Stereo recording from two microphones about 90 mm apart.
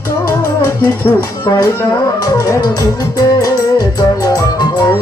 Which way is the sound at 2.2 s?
40° left (ahead or behind).